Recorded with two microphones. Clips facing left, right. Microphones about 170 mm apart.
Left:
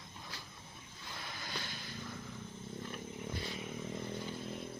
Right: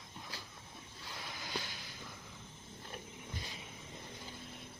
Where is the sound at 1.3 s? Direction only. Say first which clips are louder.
Right 2 dB; 10° right (ahead or behind).